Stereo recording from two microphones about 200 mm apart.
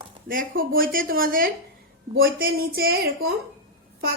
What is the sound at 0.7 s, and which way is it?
A woman's voice, 45° right (ahead or behind).